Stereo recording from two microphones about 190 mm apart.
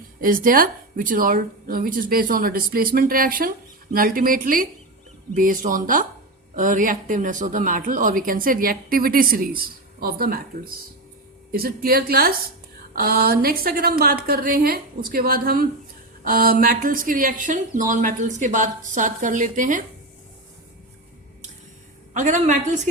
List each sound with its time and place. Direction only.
0.2 s speech: 50° right (ahead or behind)
22.1 s a woman's voice: 40° right (ahead or behind)